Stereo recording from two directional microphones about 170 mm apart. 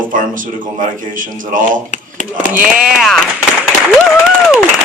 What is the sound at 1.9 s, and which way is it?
Speech, 45° left (ahead or behind).